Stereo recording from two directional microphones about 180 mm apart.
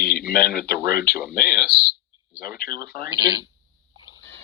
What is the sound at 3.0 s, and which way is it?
Speech, 20° right (ahead or behind).